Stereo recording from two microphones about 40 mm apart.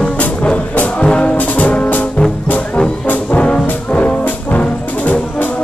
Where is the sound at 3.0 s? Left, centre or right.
Left.